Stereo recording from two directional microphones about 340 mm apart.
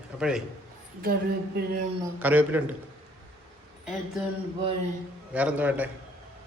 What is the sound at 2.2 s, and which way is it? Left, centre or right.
Speech, centre.